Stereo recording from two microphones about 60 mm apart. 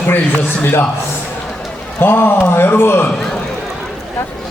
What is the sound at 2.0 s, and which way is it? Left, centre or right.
A man's voice, left.